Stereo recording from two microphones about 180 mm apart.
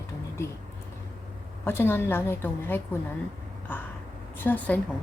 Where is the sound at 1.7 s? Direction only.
10° left (ahead or behind).